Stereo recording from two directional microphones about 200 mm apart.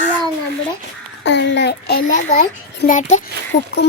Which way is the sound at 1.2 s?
60° left (ahead or behind).